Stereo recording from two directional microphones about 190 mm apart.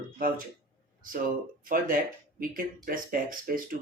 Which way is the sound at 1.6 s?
45° right (ahead or behind).